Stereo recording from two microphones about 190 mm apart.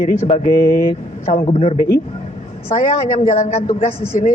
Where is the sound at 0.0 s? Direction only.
35° left (ahead or behind).